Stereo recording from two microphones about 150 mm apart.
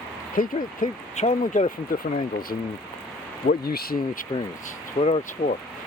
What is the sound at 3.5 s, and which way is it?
Speech, 90° left.